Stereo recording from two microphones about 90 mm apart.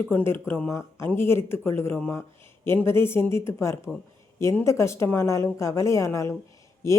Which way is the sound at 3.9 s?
Centre (ahead or behind).